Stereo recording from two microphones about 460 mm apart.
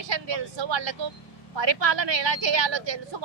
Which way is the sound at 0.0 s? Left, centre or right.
Right.